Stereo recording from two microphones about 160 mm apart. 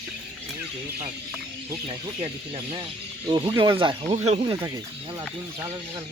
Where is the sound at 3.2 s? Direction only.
25° right (ahead or behind).